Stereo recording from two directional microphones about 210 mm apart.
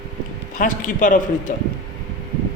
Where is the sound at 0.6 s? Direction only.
40° left (ahead or behind).